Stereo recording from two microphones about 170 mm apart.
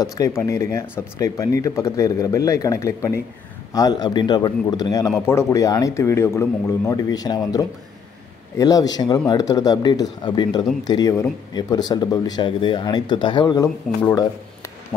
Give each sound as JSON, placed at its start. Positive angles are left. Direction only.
{"t": 0.0, "sound": "speech", "side_deg": 20}